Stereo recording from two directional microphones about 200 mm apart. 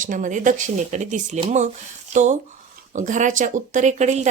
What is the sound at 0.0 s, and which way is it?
A woman's voice, 40° right (ahead or behind).